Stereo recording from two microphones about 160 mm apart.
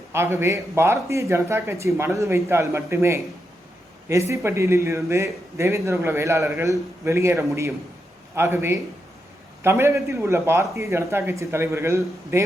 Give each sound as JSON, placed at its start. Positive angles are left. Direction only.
{"t": 0.1, "sound": "a man's voice", "side_deg": -15}